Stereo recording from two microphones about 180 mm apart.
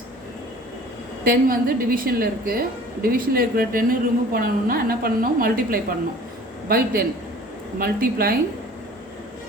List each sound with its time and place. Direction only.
1.2 s a woman's voice: 55° right (ahead or behind)